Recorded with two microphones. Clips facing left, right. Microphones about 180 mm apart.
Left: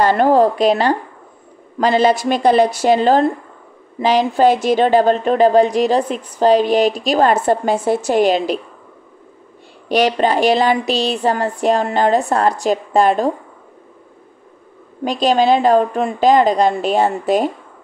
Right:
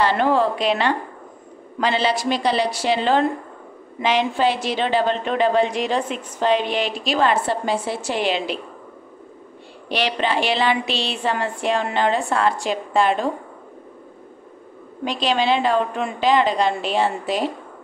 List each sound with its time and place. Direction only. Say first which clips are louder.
0.0 s a woman's voice: left 6 dB; 45° left (ahead or behind)
9.8 s speech: left 7 dB; 45° left (ahead or behind)
15.0 s a woman's voice: left 6 dB; 45° left (ahead or behind)